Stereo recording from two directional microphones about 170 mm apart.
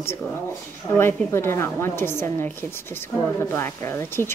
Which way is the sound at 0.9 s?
15° left (ahead or behind).